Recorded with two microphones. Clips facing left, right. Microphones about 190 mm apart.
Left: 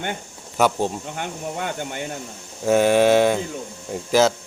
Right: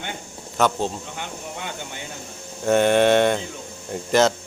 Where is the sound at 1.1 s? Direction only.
50° left (ahead or behind).